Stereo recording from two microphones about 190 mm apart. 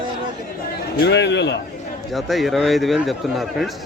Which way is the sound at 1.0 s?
65° left (ahead or behind).